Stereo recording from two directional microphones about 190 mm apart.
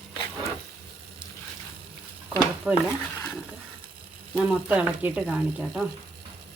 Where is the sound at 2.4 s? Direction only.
5° right (ahead or behind).